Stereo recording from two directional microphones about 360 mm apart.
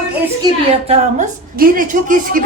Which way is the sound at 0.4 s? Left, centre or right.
Centre.